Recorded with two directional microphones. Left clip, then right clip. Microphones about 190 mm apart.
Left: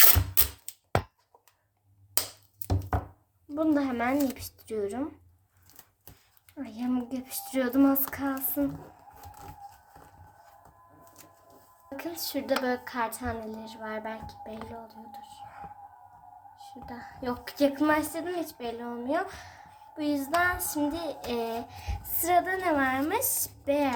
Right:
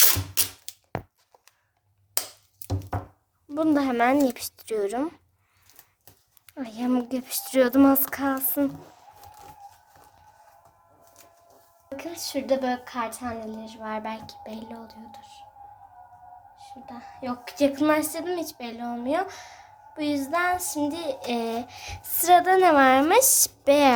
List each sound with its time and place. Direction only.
2.2 s a sound: 50° right (ahead or behind)
3.5 s a woman's voice: 50° right (ahead or behind)
6.5 s a woman's voice: 50° right (ahead or behind)
11.9 s a woman's voice: 10° right (ahead or behind); by 14.9 s 30° right (ahead or behind)
15.1 s whispering: 15° right (ahead or behind)
16.6 s a woman's voice: centre (ahead or behind)
17.7 s a woman's voice: 20° right (ahead or behind); by 23.9 s 50° right (ahead or behind)